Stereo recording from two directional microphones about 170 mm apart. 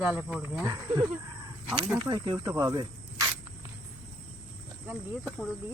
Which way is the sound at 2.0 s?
30° right (ahead or behind).